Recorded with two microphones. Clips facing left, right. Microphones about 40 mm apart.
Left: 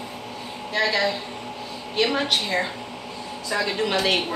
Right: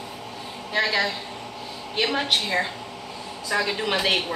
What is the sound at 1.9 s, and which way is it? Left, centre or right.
A woman's voice, centre.